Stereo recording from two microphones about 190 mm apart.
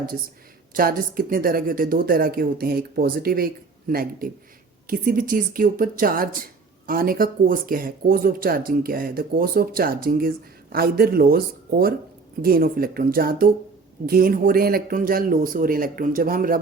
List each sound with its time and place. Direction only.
0.7 s speech: 50° right (ahead or behind)